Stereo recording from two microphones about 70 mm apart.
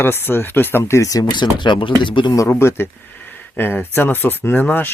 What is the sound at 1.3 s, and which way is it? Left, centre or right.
Speech, left.